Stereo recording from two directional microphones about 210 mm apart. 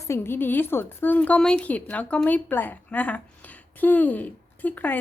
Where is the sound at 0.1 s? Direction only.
10° left (ahead or behind).